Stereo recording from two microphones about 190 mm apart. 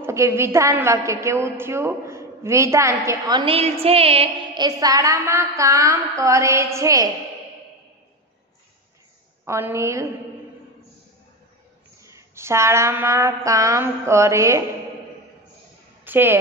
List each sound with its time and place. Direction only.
0.0 s a woman's voice: 15° right (ahead or behind)
3.5 s a woman's voice: 30° right (ahead or behind)
9.4 s a woman's voice: 15° right (ahead or behind)
12.0 s a woman's voice: 15° right (ahead or behind)
16.0 s a woman's voice: 10° right (ahead or behind)